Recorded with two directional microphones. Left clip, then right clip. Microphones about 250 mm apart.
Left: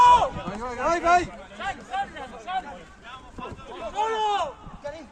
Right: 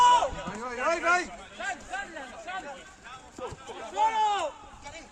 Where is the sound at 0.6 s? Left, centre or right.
Left.